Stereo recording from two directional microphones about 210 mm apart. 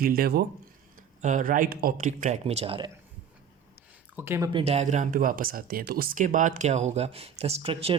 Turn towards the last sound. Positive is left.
turn(degrees=-25)  # may be behind; listen again after turning